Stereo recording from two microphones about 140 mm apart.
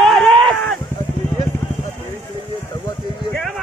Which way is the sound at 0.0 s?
5° left (ahead or behind).